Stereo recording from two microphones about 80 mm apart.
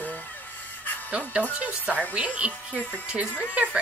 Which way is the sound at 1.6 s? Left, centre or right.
Centre.